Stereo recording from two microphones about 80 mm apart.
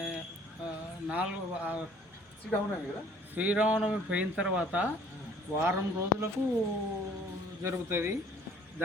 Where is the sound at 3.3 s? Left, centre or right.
Centre.